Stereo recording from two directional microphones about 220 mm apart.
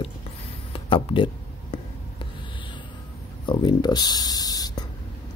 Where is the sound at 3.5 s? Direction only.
20° left (ahead or behind).